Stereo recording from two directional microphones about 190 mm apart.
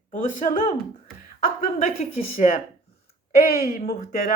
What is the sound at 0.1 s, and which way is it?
Speech, 40° left (ahead or behind).